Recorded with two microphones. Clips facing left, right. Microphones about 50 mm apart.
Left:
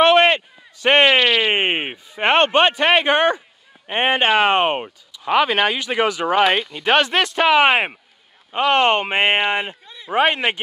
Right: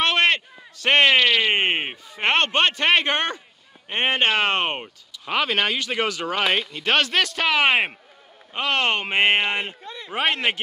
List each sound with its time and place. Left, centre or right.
0.0 s a man's voice: centre